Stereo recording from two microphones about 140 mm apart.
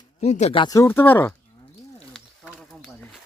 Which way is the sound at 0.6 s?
25° left (ahead or behind).